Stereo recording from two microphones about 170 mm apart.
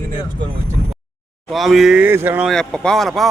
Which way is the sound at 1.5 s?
Centre (ahead or behind).